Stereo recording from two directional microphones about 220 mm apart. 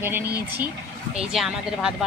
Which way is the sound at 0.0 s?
10° right (ahead or behind).